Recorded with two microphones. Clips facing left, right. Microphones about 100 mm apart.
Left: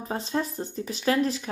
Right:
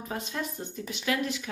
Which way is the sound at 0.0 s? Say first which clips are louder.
Left 5 dB; 30° left (ahead or behind).